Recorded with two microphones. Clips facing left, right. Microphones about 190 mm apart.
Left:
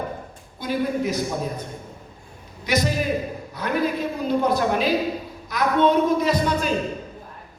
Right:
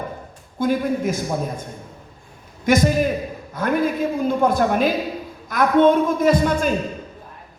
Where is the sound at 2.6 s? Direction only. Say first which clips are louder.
Right 5 dB; 50° right (ahead or behind).